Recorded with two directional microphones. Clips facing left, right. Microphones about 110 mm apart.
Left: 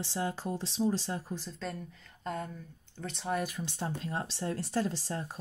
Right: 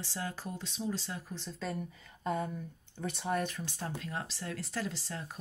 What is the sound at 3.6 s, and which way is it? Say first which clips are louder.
Speech: left 3 dB; 20° left (ahead or behind).